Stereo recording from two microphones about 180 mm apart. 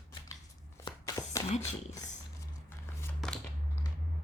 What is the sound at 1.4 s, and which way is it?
Speech, 35° left (ahead or behind).